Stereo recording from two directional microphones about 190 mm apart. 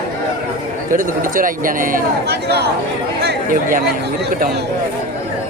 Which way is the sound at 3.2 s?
50° right (ahead or behind).